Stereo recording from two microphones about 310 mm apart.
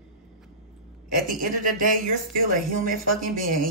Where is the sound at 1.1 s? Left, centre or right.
Right.